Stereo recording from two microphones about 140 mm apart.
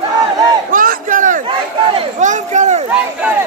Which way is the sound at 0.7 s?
75° right (ahead or behind).